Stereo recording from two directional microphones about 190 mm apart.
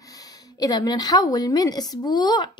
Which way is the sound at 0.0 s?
20° left (ahead or behind).